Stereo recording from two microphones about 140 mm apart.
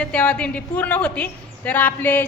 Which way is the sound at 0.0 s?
10° left (ahead or behind).